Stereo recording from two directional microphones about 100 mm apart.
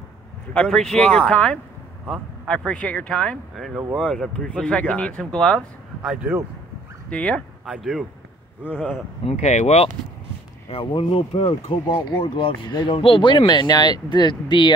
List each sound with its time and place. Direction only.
0.7 s speech: centre (ahead or behind)
7.1 s speech: 10° left (ahead or behind)
7.6 s speech: 5° right (ahead or behind)
9.2 s speech: 90° left
10.7 s speech: 65° left (ahead or behind)